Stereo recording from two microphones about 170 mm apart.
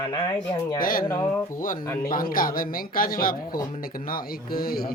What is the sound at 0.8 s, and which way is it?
Speech, 55° left (ahead or behind).